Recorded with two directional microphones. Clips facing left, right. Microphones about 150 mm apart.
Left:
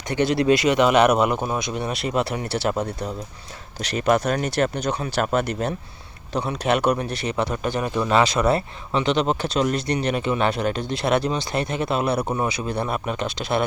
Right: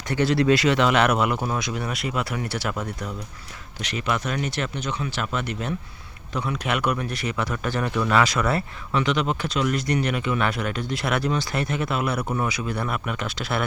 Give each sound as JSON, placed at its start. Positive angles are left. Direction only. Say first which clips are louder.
{"t": 0.1, "sound": "speech", "louder": "left 1 dB", "side_deg": 20}